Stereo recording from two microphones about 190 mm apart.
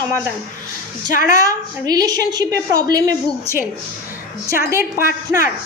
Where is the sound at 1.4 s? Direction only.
20° right (ahead or behind).